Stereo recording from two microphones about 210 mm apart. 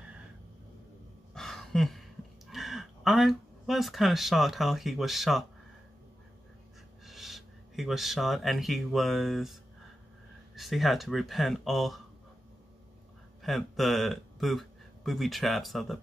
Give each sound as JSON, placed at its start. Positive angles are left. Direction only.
{"t": 1.3, "sound": "a sound", "side_deg": 0}
{"t": 7.1, "sound": "speech", "side_deg": 0}
{"t": 13.4, "sound": "speech", "side_deg": 0}